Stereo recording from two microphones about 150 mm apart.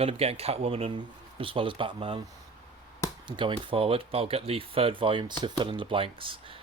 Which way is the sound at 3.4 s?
35° right (ahead or behind).